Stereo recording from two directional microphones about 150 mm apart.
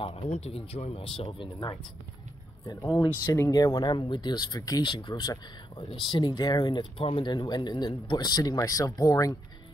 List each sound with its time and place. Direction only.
0.0 s speech: 40° left (ahead or behind)
2.6 s speech: 25° left (ahead or behind)